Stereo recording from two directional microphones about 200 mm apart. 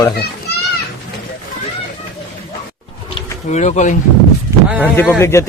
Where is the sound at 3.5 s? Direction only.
35° left (ahead or behind).